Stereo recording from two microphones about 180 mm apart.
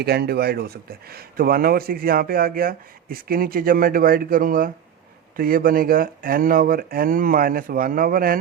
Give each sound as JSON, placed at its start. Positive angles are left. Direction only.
{"t": 0.0, "sound": "speech", "side_deg": -60}